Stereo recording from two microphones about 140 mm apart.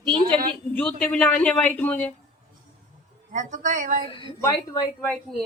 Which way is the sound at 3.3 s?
65° right (ahead or behind).